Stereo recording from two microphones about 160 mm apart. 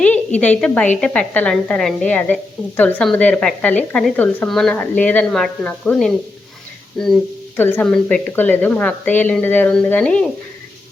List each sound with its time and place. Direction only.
0.3 s a woman's voice: 10° left (ahead or behind)
7.5 s a woman's voice: 10° left (ahead or behind)